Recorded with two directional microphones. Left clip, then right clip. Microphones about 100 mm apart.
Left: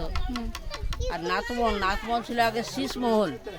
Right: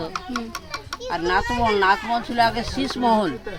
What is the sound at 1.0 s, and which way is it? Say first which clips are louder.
Speech: right 7 dB; 30° left (ahead or behind).